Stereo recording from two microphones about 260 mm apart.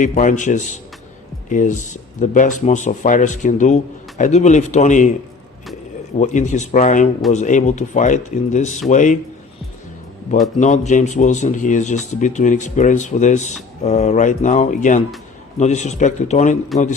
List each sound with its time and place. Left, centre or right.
0.0 s speech: left
6.1 s speech: left
10.6 s speech: left